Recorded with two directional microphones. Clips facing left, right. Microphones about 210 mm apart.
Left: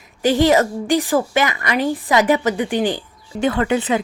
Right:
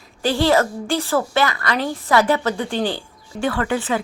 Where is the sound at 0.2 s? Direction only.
20° left (ahead or behind).